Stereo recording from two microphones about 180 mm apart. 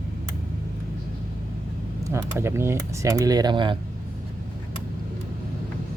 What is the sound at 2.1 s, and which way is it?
Speech, 15° right (ahead or behind).